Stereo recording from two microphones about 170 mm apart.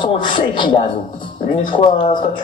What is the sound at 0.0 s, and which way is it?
Speech, 30° left (ahead or behind).